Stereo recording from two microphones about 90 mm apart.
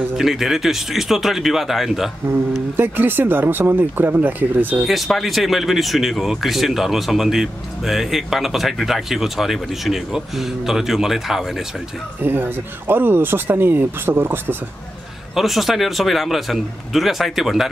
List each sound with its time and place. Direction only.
0.1 s speech: 5° right (ahead or behind)
2.8 s speech: 25° right (ahead or behind)
4.8 s speech: centre (ahead or behind)
12.2 s speech: 20° right (ahead or behind)
15.3 s speech: centre (ahead or behind)